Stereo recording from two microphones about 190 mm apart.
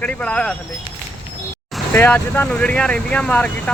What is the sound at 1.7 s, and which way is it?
Speech, 10° left (ahead or behind).